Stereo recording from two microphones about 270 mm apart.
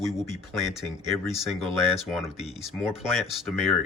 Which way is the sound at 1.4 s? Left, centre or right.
Centre.